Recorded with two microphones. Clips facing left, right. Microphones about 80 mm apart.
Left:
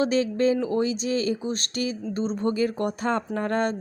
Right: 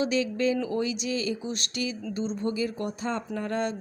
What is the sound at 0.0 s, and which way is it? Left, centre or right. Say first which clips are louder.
Speech: left 4 dB; left.